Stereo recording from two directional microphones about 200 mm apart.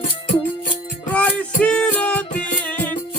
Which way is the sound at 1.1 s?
5° left (ahead or behind).